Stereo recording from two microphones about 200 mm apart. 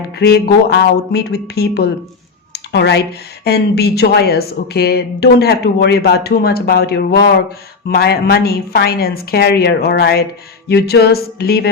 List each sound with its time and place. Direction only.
0.1 s speech: 55° left (ahead or behind)
2.5 s a sound: 55° left (ahead or behind)
3.4 s speech: 55° left (ahead or behind)